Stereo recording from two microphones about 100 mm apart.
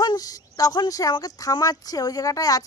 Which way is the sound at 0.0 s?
40° left (ahead or behind).